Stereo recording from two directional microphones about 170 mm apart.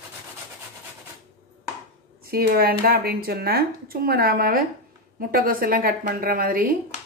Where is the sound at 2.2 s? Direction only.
65° right (ahead or behind).